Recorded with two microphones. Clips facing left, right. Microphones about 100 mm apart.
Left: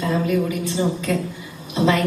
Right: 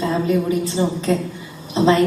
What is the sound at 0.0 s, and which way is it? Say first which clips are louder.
A woman's voice: right 2 dB; 30° right (ahead or behind).